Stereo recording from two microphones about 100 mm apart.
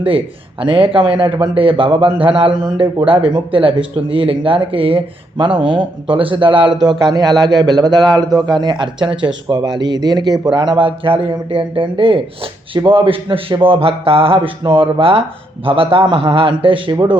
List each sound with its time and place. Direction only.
0.6 s speech: 60° right (ahead or behind)
6.8 s a man's voice: 40° right (ahead or behind); by 17.0 s 60° right (ahead or behind)